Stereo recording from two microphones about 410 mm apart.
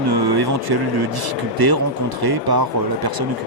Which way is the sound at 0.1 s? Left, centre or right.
Right.